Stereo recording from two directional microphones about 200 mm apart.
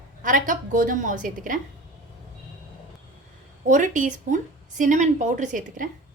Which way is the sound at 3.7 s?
40° right (ahead or behind).